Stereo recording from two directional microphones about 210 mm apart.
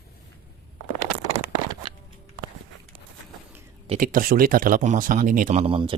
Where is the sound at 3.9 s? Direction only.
40° right (ahead or behind).